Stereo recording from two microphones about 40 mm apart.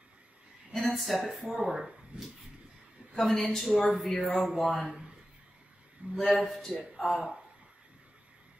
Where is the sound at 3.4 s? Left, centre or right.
Centre.